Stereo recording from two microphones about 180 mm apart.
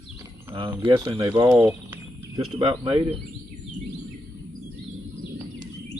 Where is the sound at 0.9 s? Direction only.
25° right (ahead or behind).